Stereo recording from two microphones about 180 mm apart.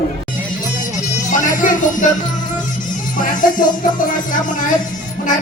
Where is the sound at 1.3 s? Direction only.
45° left (ahead or behind).